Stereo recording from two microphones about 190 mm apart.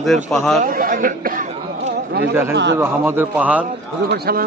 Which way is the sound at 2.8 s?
10° right (ahead or behind).